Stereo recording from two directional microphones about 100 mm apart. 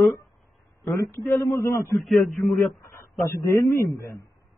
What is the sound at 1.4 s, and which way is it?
Speech, 40° left (ahead or behind).